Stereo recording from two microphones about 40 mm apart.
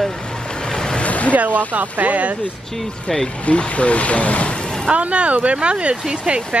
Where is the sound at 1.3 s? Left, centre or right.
Right.